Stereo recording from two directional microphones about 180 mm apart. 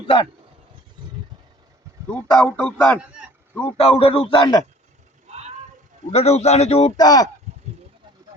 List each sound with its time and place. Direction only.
2.0 s a man's voice: 5° left (ahead or behind)
3.8 s speech: 35° left (ahead or behind)
6.1 s speech: 35° left (ahead or behind)
6.9 s speech: 20° left (ahead or behind)